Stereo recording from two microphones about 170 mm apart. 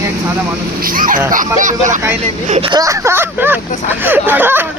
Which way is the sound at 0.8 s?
55° right (ahead or behind).